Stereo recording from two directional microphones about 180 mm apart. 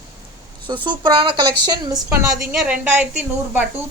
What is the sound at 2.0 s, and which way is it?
A woman's voice, 10° right (ahead or behind).